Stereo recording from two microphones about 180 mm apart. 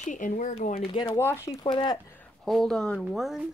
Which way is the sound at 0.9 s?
25° left (ahead or behind).